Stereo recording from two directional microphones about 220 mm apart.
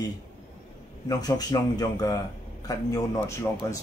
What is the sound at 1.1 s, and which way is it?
A man's voice, 15° left (ahead or behind).